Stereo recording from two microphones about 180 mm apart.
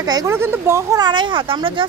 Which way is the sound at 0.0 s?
20° right (ahead or behind).